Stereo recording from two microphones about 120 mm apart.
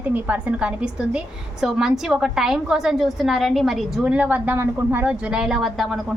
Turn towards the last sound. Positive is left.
turn(degrees=0)  # may be behind; listen again after turning